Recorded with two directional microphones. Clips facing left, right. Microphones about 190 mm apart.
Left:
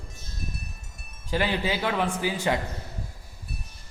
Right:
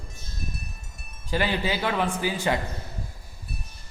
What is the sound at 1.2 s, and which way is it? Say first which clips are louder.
A woman's voice: even; 15° left (ahead or behind).